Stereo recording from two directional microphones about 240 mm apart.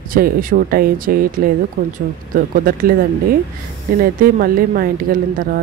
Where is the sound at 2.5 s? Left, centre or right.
Right.